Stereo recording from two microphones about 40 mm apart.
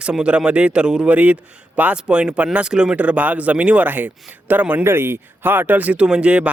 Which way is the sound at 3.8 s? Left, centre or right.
Right.